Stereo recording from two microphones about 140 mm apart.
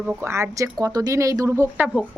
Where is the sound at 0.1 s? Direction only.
15° right (ahead or behind).